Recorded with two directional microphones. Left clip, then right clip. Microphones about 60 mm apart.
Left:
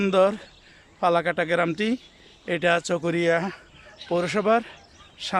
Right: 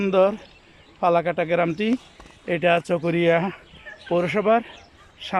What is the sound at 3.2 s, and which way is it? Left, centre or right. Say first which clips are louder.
Speech: right 4 dB; centre.